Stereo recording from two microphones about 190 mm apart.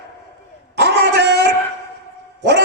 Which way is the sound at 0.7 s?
60° right (ahead or behind).